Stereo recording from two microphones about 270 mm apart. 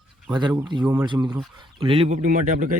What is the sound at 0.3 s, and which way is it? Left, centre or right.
Speech, centre.